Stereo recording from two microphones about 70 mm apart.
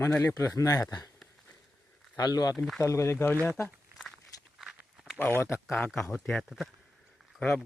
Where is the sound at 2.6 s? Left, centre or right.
Centre.